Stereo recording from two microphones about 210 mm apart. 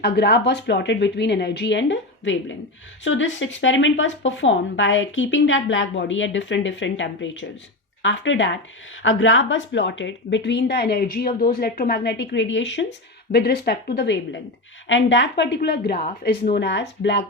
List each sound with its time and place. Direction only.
0.0 s a woman's voice: 55° left (ahead or behind)